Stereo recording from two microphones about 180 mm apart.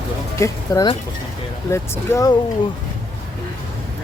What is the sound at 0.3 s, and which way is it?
Speech, 15° left (ahead or behind).